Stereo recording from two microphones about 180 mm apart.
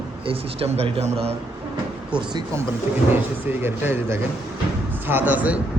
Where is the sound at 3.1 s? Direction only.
10° right (ahead or behind).